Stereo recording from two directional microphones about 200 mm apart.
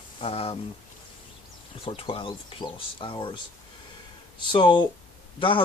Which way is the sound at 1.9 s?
25° left (ahead or behind).